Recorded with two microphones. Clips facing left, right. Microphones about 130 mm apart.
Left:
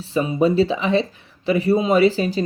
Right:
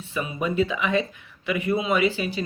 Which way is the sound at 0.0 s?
30° left (ahead or behind).